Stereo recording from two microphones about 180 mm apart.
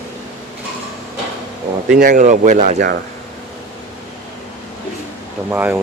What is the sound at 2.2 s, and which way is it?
Speech, 45° right (ahead or behind).